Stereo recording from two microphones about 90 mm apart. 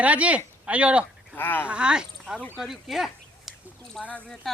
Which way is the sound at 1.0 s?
20° left (ahead or behind).